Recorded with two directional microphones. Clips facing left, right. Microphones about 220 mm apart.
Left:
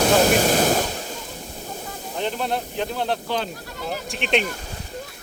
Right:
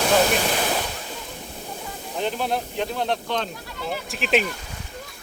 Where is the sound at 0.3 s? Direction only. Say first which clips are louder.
Left 5 dB; 45° left (ahead or behind).